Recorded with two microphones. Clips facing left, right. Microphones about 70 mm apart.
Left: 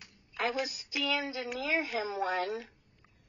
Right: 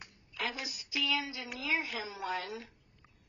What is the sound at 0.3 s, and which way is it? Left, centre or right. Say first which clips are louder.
A woman's voice: left 6 dB; left.